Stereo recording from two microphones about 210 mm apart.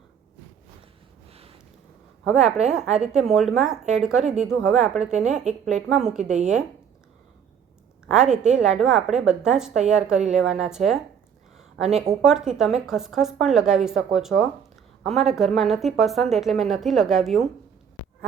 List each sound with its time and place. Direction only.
1.3 s a sound: 30° right (ahead or behind)
2.3 s a woman's voice: 5° right (ahead or behind)
8.0 s a woman's voice: 5° right (ahead or behind)
12.2 s a woman's voice: centre (ahead or behind)